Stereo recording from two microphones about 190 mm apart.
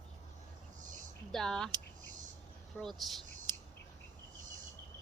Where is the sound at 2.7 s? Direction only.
Centre (ahead or behind).